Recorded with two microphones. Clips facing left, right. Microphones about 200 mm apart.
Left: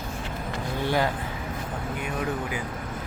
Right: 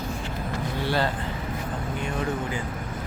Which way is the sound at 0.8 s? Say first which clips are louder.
Left 1 dB; 15° left (ahead or behind).